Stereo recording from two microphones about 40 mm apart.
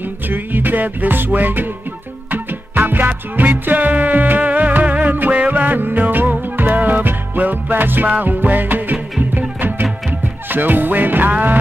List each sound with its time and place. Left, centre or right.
0.3 s music: right